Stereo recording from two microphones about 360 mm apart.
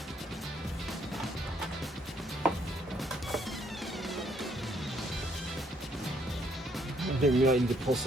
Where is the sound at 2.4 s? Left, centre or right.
Centre.